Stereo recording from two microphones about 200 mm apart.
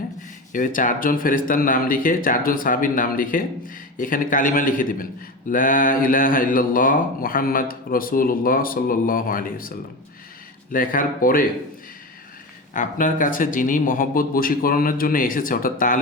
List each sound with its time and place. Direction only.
0.5 s mantra: 40° left (ahead or behind)
12.7 s mantra: 40° left (ahead or behind)